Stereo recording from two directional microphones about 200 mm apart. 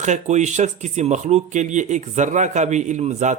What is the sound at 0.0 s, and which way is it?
Speech, 35° right (ahead or behind).